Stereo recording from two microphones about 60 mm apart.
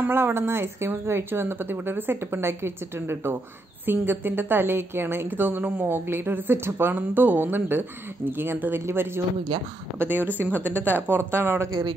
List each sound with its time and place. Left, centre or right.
0.1 s a woman's voice: right
9.9 s a woman's voice: right